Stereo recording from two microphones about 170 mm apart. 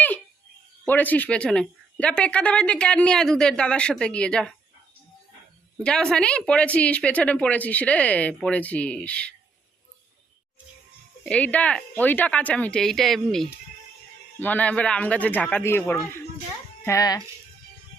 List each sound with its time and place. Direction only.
0.9 s speech: 10° left (ahead or behind)
5.8 s speech: 5° left (ahead or behind)
11.3 s speech: 10° left (ahead or behind)